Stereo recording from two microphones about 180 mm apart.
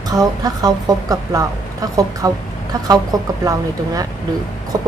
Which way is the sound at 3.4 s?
20° right (ahead or behind).